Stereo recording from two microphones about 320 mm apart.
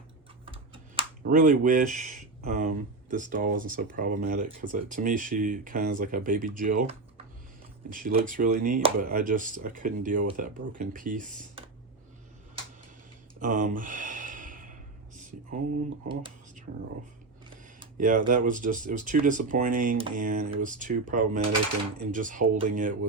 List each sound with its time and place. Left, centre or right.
0.4 s computer keyboard: centre
1.2 s speech: right
13.4 s sigh: right
16.0 s a sound: centre
17.7 s speech: right